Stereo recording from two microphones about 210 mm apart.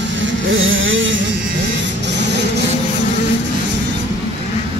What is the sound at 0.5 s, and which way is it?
Vehicle, 70° right (ahead or behind).